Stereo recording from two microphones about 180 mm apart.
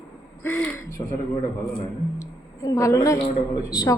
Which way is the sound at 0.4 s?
10° left (ahead or behind).